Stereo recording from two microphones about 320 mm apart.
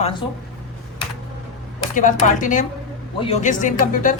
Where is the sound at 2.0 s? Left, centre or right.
Left.